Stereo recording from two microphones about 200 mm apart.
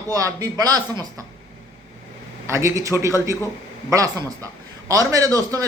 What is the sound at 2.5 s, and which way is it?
A man's voice, 15° right (ahead or behind).